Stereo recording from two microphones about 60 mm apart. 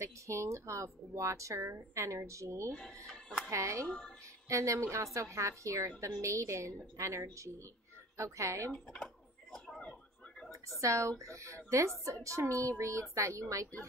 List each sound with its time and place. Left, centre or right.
0.0 s a woman's voice: right
8.9 s a sound: centre
10.8 s a woman's voice: right